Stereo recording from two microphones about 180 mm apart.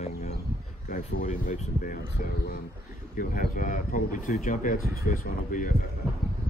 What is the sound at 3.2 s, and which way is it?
Speech, 50° left (ahead or behind).